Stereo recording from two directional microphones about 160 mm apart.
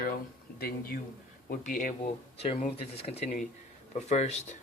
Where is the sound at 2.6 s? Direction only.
45° left (ahead or behind).